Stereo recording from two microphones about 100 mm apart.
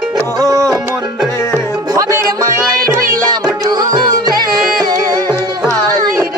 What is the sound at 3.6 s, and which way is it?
Music, 45° right (ahead or behind).